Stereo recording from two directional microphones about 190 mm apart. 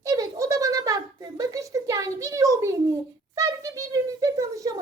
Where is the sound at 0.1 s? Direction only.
15° right (ahead or behind).